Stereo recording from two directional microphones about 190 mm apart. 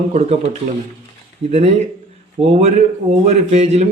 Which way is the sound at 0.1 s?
35° right (ahead or behind).